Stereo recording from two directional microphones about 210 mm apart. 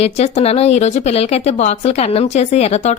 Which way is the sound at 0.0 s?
30° left (ahead or behind).